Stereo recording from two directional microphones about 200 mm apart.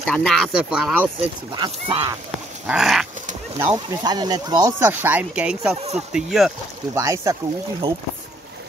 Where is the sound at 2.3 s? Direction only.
5° right (ahead or behind).